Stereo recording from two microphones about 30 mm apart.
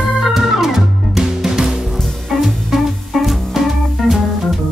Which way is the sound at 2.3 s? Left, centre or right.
Centre.